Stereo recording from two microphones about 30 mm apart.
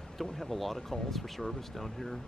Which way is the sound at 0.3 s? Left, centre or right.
Centre.